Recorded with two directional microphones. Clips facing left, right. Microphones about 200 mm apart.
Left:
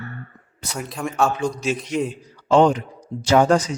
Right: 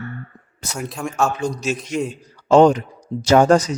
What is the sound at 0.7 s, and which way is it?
Speech, centre (ahead or behind).